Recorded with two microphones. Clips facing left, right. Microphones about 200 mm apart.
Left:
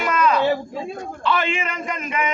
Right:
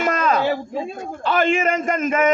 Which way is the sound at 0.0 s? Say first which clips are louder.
Even; 45° right (ahead or behind).